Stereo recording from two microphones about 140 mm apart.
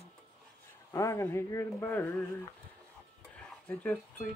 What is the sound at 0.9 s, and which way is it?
Speech, 20° left (ahead or behind).